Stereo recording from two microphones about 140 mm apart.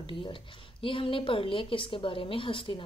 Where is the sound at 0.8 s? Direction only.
40° left (ahead or behind).